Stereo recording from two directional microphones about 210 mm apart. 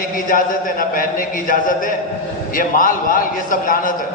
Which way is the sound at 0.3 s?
40° left (ahead or behind).